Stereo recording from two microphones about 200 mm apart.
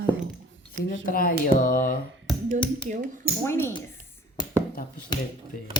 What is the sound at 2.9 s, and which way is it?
Speech, 40° right (ahead or behind).